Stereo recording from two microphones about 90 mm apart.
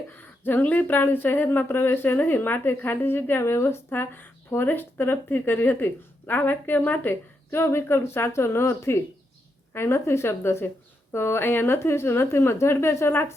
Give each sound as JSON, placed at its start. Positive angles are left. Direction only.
{"t": 0.4, "sound": "speech", "side_deg": 20}